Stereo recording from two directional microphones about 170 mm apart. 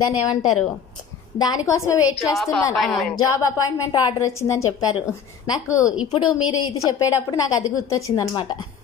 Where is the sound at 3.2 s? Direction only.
20° left (ahead or behind).